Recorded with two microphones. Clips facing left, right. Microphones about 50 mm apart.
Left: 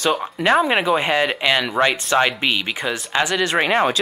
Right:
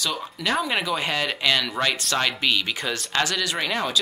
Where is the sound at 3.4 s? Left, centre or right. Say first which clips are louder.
Left 8 dB; left.